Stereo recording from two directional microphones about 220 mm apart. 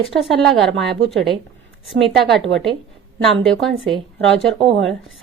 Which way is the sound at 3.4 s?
Centre (ahead or behind).